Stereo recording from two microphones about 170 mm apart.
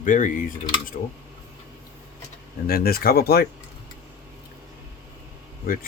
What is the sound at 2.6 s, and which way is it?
Speech, 65° left (ahead or behind).